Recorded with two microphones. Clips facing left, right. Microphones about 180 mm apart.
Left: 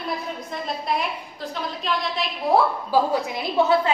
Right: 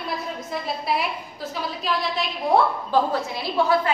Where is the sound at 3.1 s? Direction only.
20° left (ahead or behind).